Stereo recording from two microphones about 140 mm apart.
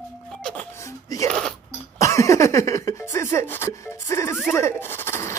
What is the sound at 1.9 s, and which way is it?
Speech, 20° left (ahead or behind).